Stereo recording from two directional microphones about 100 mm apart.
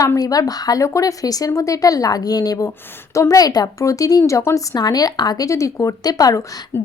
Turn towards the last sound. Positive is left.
turn(degrees=40)  # may be behind; listen again after turning